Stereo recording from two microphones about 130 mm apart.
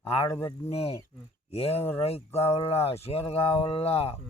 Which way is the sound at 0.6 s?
50° left (ahead or behind).